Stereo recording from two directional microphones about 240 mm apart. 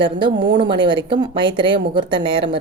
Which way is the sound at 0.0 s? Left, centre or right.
Right.